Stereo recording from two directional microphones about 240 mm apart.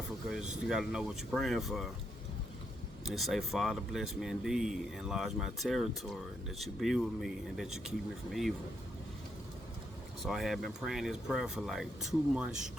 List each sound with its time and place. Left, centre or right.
0.3 s speech: centre
3.1 s speech: centre
10.2 s speech: centre